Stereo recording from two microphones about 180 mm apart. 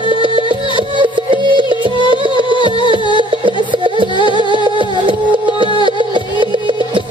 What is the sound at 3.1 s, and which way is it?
Music, 25° right (ahead or behind).